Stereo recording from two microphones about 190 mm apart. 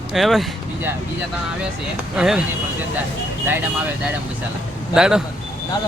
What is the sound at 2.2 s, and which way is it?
Speech, 5° right (ahead or behind).